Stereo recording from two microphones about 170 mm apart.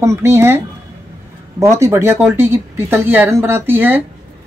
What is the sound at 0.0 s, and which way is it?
Speech, 15° right (ahead or behind).